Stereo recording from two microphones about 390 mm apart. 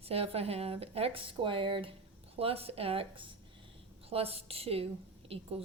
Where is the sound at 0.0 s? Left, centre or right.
Centre.